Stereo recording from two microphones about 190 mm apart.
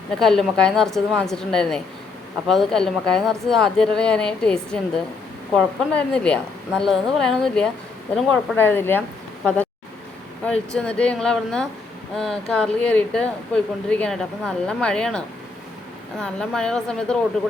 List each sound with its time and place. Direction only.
0.2 s speech: centre (ahead or behind)